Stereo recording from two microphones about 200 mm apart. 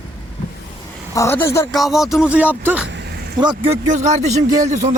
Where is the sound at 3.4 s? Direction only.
20° right (ahead or behind).